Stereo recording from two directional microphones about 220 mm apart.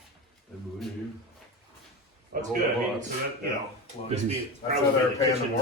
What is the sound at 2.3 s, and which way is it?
Speech, 40° right (ahead or behind).